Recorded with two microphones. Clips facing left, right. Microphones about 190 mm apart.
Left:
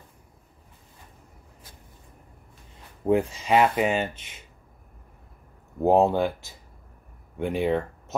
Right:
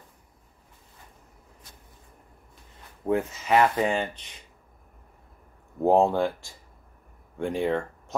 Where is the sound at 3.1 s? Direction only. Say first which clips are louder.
Left 2 dB; 15° left (ahead or behind).